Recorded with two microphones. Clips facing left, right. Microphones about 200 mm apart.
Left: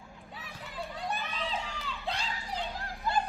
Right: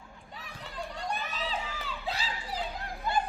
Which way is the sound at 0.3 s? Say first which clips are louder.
Right 1 dB; 5° left (ahead or behind).